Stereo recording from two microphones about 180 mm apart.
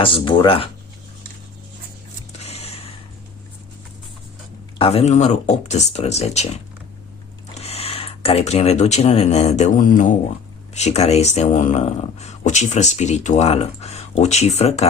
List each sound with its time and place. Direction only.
0.0 s speech: 30° left (ahead or behind)
2.4 s a sound: 35° left (ahead or behind)
4.8 s speech: 35° left (ahead or behind)
7.6 s speech: 35° left (ahead or behind)